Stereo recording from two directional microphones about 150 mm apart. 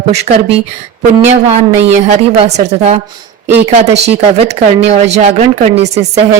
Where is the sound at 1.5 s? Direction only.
45° right (ahead or behind).